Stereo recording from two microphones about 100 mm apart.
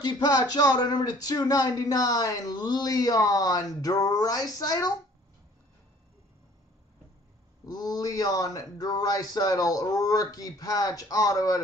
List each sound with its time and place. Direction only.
0.0 s speech: 45° left (ahead or behind)
7.6 s speech: 40° left (ahead or behind)